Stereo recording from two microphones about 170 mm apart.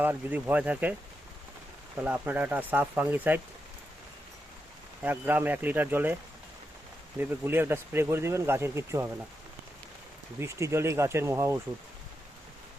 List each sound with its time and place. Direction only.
0.0 s speech: 10° right (ahead or behind)
2.0 s speech: 10° right (ahead or behind)
5.0 s speech: 10° right (ahead or behind)
7.2 s speech: 10° right (ahead or behind)
10.4 s speech: 15° right (ahead or behind)